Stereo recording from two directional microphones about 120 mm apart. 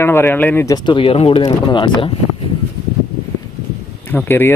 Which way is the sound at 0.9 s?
50° left (ahead or behind).